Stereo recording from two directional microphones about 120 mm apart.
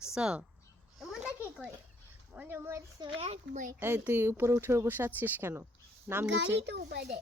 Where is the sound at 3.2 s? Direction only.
75° right (ahead or behind).